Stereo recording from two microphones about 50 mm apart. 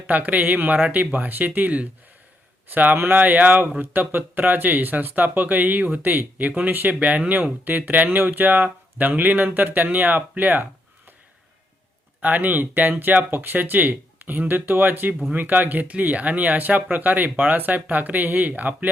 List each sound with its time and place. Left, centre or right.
0.1 s speech: right
12.2 s speech: right